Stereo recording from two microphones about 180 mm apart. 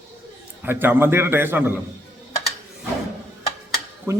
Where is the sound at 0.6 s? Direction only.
10° right (ahead or behind).